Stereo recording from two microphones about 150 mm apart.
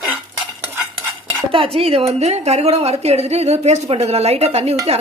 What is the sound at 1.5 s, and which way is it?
A woman's voice, 40° right (ahead or behind).